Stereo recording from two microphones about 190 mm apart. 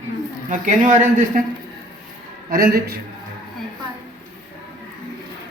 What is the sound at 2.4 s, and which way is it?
Speech, 50° right (ahead or behind).